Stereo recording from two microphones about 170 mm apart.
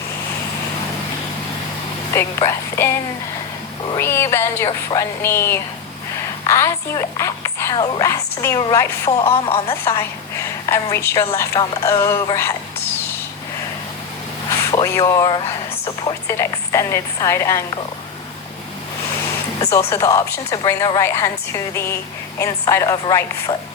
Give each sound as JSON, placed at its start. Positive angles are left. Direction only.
{"t": 2.1, "sound": "a woman's voice", "side_deg": 15}
{"t": 3.9, "sound": "a woman's voice", "side_deg": 15}
{"t": 9.2, "sound": "speech", "side_deg": 35}
{"t": 9.6, "sound": "a woman's voice", "side_deg": 15}
{"t": 14.5, "sound": "a woman's voice", "side_deg": 20}
{"t": 19.9, "sound": "a woman's voice", "side_deg": 20}